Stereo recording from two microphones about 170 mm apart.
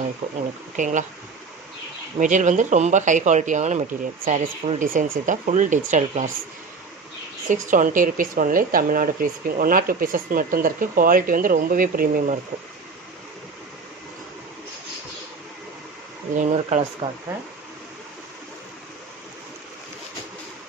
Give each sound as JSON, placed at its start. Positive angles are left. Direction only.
{"t": 0.2, "sound": "speech", "side_deg": -35}
{"t": 0.7, "sound": "speech", "side_deg": -50}
{"t": 2.1, "sound": "speech", "side_deg": -45}
{"t": 7.4, "sound": "speech", "side_deg": -50}
{"t": 16.3, "sound": "speech", "side_deg": -40}